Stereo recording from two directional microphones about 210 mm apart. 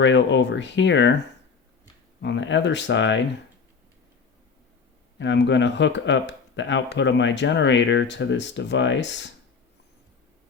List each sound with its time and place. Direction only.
0.0 s speech: 55° left (ahead or behind)
2.2 s speech: 60° left (ahead or behind)
5.2 s speech: 55° left (ahead or behind)